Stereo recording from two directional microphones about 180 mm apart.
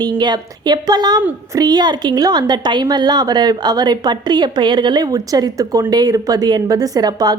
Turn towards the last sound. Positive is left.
turn(degrees=-20)  # may be behind; listen again after turning